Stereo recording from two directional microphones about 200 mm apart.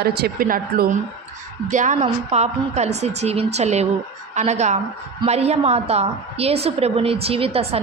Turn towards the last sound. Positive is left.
turn(degrees=-30)  # may be behind; listen again after turning